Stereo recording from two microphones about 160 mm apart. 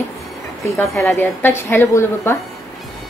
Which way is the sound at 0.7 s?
15° left (ahead or behind).